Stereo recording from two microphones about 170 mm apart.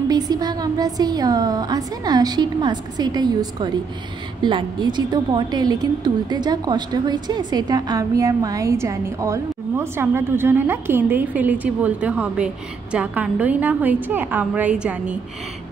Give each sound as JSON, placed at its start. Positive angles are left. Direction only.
{"t": 0.1, "sound": "a woman's voice", "side_deg": -25}